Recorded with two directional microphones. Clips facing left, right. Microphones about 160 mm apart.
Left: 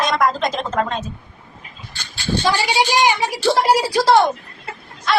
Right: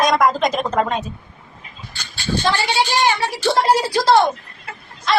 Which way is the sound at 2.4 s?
15° left (ahead or behind).